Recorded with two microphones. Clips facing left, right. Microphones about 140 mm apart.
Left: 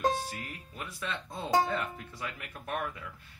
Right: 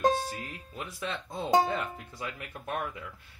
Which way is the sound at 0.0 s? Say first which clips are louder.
Right 3 dB; 20° right (ahead or behind).